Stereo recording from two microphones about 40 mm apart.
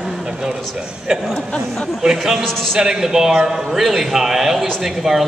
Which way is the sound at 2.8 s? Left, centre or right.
Centre.